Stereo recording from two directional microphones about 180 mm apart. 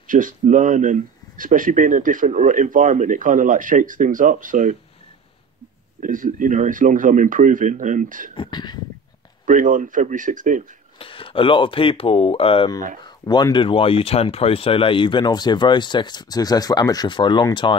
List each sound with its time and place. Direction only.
0.0 s speech: 45° right (ahead or behind)
5.9 s speech: 50° right (ahead or behind)
8.4 s speech: 25° left (ahead or behind)
9.5 s speech: 45° right (ahead or behind)
11.0 s speech: 30° left (ahead or behind)